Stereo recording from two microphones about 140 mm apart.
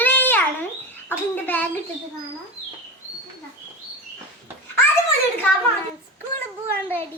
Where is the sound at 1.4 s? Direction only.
10° left (ahead or behind).